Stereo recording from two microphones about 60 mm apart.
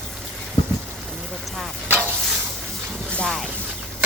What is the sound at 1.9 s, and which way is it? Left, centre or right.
Stir, right.